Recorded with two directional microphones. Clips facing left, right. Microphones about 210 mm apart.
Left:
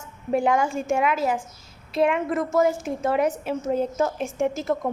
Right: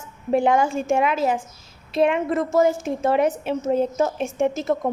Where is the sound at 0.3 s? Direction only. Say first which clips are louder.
Right 3 dB; 25° right (ahead or behind).